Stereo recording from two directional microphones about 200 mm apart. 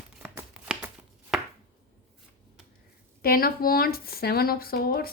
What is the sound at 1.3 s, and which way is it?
Chopping, centre (ahead or behind).